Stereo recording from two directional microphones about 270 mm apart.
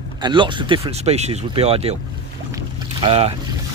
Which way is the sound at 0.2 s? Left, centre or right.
Centre.